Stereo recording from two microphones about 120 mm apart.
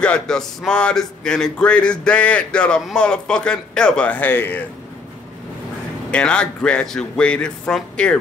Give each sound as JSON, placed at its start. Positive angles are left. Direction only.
{"t": 0.0, "sound": "speech", "side_deg": 5}
{"t": 6.1, "sound": "speech", "side_deg": 10}